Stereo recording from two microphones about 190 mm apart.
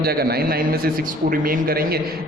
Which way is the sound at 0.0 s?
55° right (ahead or behind).